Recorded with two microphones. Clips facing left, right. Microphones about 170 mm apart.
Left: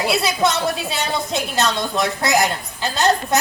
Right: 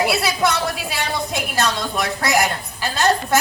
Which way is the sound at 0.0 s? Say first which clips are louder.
Even; 20° left (ahead or behind).